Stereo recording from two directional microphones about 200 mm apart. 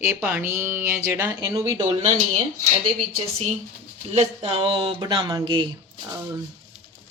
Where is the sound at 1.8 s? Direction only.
35° right (ahead or behind).